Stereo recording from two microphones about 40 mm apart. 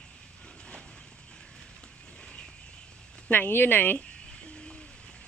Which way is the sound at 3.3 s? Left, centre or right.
Left.